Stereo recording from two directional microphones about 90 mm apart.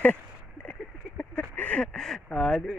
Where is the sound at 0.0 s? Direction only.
15° left (ahead or behind).